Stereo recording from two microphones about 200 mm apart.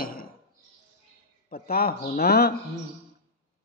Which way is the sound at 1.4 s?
45° left (ahead or behind).